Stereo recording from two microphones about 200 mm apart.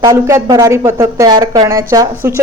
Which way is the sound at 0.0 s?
15° right (ahead or behind).